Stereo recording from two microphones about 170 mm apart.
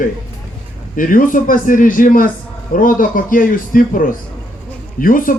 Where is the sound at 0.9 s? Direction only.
55° left (ahead or behind).